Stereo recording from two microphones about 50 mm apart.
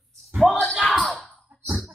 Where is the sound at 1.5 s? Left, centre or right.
Right.